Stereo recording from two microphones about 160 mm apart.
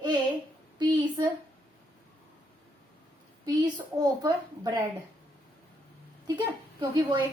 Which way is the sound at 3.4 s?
25° right (ahead or behind).